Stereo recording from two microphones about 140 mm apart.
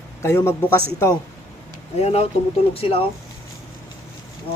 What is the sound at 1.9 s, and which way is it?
Speech, 50° left (ahead or behind).